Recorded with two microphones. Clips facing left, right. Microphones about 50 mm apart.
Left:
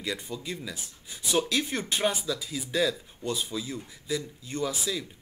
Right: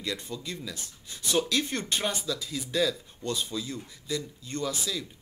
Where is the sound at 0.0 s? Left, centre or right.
Centre.